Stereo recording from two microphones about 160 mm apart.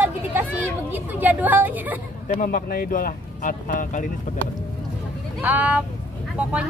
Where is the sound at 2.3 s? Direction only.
55° left (ahead or behind).